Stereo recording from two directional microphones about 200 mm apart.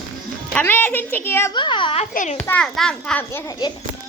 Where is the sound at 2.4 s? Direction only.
5° left (ahead or behind).